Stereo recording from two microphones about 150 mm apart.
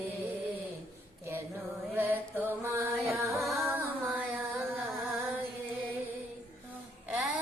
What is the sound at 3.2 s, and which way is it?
Music, centre (ahead or behind).